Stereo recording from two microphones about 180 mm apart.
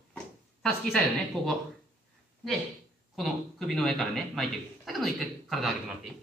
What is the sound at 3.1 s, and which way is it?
A man's voice, centre (ahead or behind).